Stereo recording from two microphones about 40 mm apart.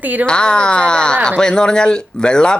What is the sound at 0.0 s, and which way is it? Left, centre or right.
Speech, right.